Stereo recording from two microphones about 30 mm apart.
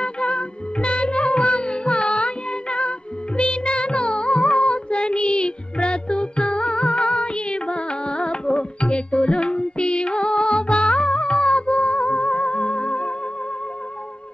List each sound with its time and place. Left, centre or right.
0.0 s music: left